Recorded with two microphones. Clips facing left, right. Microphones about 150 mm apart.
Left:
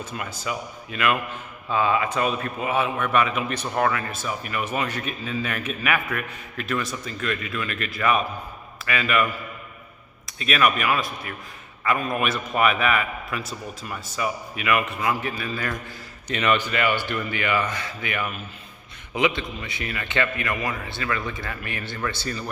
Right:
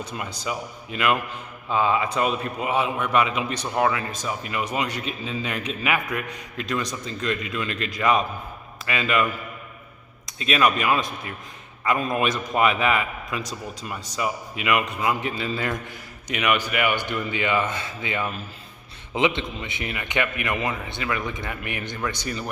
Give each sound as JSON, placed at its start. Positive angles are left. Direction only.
{"t": 0.4, "sound": "a man's voice", "side_deg": -20}
{"t": 10.2, "sound": "a man's voice", "side_deg": -25}
{"t": 16.3, "sound": "a man's voice", "side_deg": -10}